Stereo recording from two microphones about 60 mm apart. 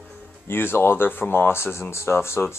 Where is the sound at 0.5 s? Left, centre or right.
Left.